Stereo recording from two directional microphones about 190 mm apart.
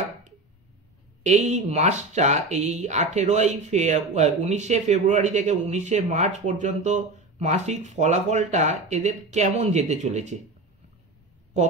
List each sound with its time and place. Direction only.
1.2 s speech: 35° right (ahead or behind)